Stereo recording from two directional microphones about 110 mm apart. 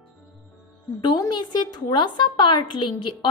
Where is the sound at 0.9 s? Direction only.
40° left (ahead or behind).